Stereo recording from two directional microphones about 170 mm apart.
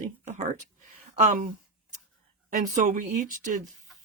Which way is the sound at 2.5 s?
45° right (ahead or behind).